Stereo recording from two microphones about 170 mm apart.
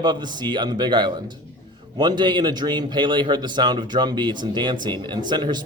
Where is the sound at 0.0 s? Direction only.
25° right (ahead or behind).